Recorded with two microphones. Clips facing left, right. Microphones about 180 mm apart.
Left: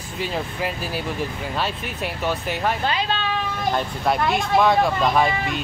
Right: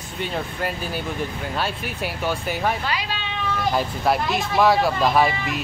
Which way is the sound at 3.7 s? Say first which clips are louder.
Right 1 dB; centre (ahead or behind).